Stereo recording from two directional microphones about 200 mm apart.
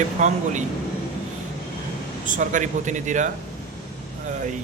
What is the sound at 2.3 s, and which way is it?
A man's voice, 40° right (ahead or behind).